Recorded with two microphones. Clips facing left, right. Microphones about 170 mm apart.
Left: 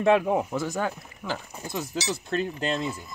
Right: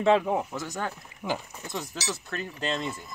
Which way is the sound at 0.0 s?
10° left (ahead or behind).